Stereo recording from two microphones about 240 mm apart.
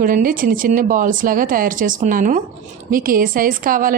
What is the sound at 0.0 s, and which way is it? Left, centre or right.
A woman's voice, right.